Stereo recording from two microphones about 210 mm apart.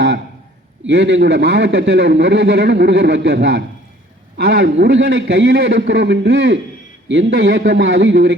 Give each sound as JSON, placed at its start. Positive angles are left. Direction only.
{"t": 0.9, "sound": "a man's voice", "side_deg": -60}